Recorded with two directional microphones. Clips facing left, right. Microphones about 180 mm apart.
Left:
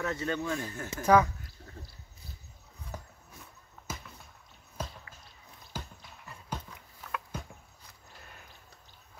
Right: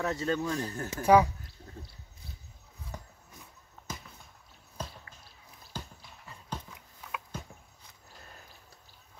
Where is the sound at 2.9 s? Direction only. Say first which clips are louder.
Left 2 dB; 5° left (ahead or behind).